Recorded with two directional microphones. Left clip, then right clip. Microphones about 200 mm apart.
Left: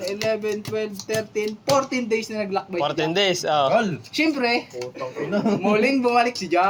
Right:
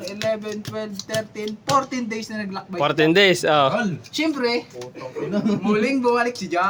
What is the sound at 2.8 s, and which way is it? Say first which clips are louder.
Speech: right 6 dB; 45° right (ahead or behind).